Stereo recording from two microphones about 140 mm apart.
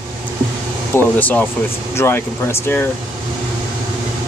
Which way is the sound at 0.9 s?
10° left (ahead or behind).